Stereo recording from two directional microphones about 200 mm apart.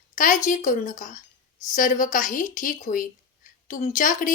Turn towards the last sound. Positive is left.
turn(degrees=40)  # may be behind; listen again after turning